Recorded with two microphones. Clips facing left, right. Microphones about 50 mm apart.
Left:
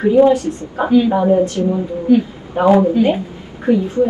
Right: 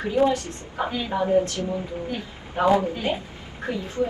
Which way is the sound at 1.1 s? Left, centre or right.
Left.